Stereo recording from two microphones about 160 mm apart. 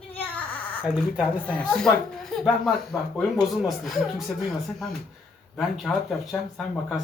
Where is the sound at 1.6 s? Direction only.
5° left (ahead or behind).